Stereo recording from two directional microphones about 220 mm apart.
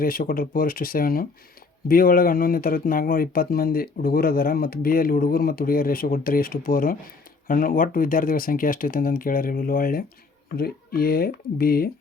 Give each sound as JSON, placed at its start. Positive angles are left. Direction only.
{"t": 0.0, "sound": "speech", "side_deg": 40}